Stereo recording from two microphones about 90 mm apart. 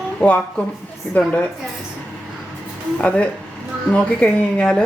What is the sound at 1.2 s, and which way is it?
Speech, 15° left (ahead or behind).